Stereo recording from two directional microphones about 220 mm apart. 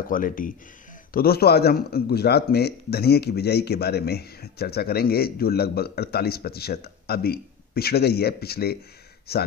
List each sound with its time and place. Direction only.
0.1 s a man's voice: 40° left (ahead or behind)